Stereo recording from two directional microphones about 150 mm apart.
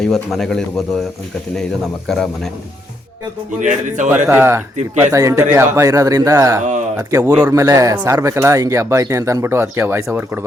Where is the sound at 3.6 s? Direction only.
55° right (ahead or behind).